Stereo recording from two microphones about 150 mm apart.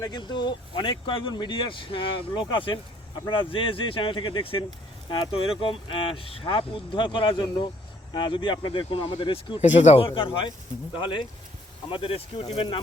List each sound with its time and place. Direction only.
0.0 s speech: 30° left (ahead or behind)
9.6 s speech: 50° left (ahead or behind)